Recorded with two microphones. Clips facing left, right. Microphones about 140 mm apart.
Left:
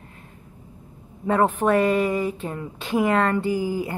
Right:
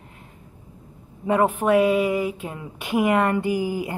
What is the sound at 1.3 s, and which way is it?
Speech, 10° right (ahead or behind).